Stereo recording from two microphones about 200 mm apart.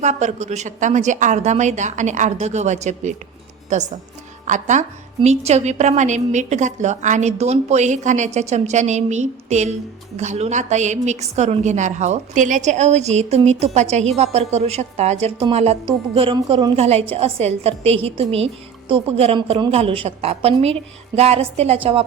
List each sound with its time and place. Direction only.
0.0 s a woman's voice: 35° right (ahead or behind)